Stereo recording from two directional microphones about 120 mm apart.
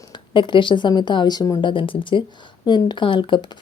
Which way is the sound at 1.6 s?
45° left (ahead or behind).